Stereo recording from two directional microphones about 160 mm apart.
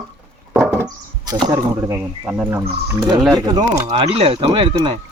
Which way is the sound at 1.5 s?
20° right (ahead or behind).